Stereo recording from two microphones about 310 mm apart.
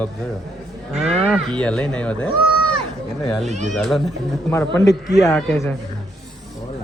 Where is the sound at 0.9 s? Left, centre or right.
Centre.